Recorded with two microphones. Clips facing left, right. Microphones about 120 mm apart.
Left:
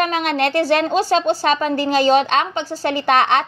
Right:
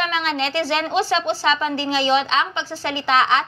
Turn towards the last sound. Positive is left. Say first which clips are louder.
# left 3 dB
turn(degrees=50)  # may be behind; listen again after turning